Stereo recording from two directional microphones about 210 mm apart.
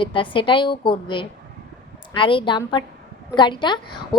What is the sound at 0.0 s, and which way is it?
A woman's voice, 25° left (ahead or behind).